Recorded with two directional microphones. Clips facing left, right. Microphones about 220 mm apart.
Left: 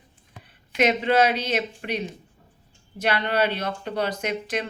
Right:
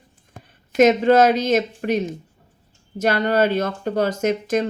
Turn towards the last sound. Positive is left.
turn(degrees=-45)  # may be behind; listen again after turning